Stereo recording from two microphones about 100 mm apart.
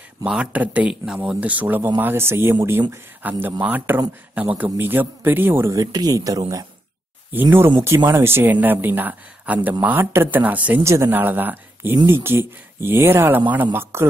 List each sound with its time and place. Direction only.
0.2 s speech: 10° right (ahead or behind)
5.7 s speech: 40° right (ahead or behind)
7.3 s speech: 25° right (ahead or behind)
10.8 s speech: 25° right (ahead or behind)